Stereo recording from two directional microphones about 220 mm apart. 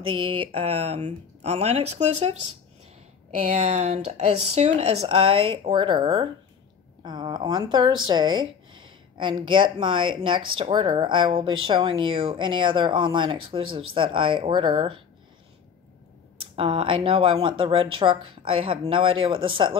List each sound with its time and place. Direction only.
0.1 s speech: 25° right (ahead or behind)
3.3 s speech: 30° right (ahead or behind)
16.5 s speech: 25° right (ahead or behind)